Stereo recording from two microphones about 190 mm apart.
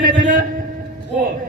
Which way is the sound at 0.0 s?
45° right (ahead or behind).